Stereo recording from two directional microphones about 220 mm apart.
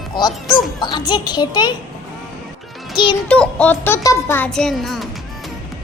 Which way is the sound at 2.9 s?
20° left (ahead or behind).